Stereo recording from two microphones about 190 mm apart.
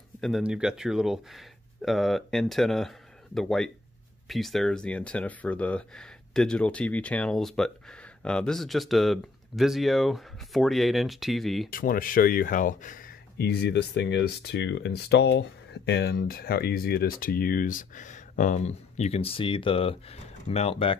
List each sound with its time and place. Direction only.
0.2 s speech: centre (ahead or behind)
11.7 s speech: 50° left (ahead or behind); by 20.9 s 30° left (ahead or behind)